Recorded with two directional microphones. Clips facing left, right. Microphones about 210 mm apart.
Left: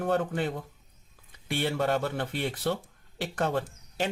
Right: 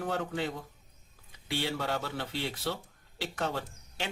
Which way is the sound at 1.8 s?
55° left (ahead or behind).